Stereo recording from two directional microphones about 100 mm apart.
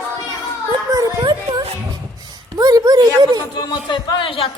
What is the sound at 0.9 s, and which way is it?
Singing, 35° right (ahead or behind).